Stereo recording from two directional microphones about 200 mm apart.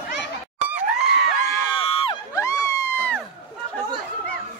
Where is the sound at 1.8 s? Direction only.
30° left (ahead or behind).